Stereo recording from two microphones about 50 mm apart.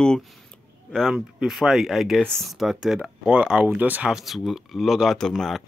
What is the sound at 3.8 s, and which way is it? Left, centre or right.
Speech, right.